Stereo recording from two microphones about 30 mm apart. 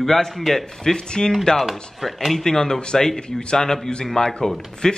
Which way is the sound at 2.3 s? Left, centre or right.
Centre.